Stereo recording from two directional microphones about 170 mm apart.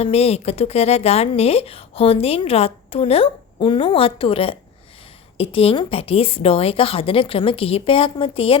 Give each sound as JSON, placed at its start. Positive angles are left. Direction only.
{"t": 0.0, "sound": "speech", "side_deg": 35}